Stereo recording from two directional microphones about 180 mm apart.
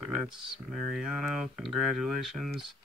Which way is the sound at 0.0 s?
Centre (ahead or behind).